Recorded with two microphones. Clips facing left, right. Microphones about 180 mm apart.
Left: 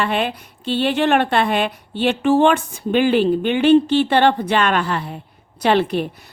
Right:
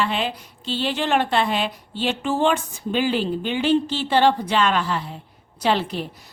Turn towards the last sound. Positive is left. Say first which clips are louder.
# left 5 dB
turn(degrees=60)  # may be behind; listen again after turning